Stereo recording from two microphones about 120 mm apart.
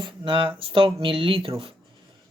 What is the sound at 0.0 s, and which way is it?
Speech, 45° right (ahead or behind).